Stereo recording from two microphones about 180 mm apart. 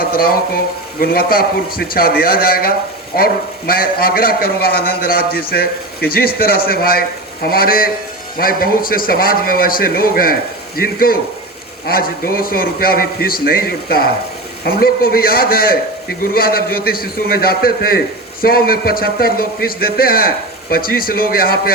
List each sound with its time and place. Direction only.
0.0 s a man's voice: 55° left (ahead or behind)